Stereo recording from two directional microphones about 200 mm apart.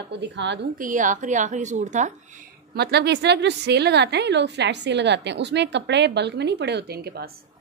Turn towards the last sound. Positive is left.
turn(degrees=-55)  # may be behind; listen again after turning